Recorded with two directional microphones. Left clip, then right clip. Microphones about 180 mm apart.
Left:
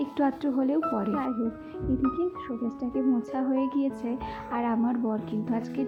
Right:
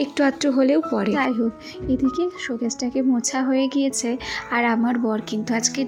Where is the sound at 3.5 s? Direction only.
20° right (ahead or behind).